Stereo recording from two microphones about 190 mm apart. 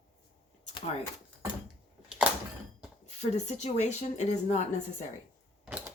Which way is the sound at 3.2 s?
35° left (ahead or behind).